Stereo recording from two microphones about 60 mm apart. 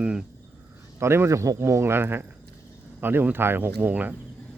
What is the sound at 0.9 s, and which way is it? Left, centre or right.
Speech, right.